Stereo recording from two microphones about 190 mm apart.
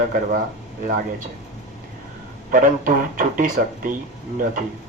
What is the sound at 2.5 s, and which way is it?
Speech, 45° right (ahead or behind).